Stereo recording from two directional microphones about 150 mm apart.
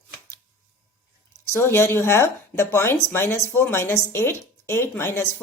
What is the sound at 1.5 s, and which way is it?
Speech, 15° left (ahead or behind).